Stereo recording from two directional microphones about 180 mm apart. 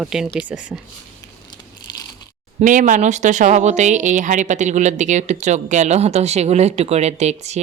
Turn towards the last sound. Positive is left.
turn(degrees=-40)  # may be behind; listen again after turning